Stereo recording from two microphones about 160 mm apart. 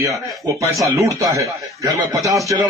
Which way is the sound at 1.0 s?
20° right (ahead or behind).